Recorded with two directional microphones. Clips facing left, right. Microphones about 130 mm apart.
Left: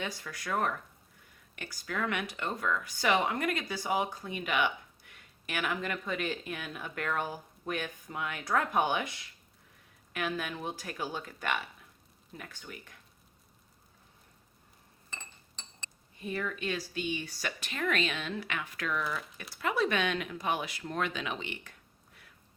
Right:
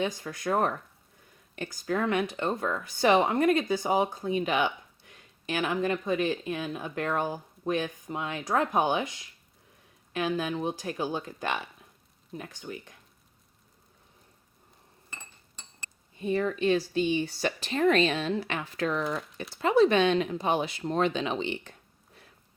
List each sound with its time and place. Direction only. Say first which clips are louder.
0.0 s speech: right 8 dB; 25° right (ahead or behind)
15.1 s chink: even; 10° right (ahead or behind)
16.2 s speech: right 9 dB; 30° right (ahead or behind)